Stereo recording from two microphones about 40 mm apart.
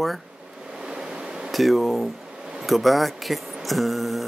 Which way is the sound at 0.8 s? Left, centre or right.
Centre.